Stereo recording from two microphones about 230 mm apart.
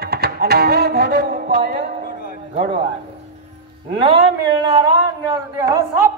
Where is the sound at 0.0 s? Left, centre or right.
Right.